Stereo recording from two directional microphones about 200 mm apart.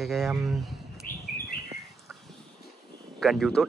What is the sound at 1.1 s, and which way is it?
Bird, 45° left (ahead or behind).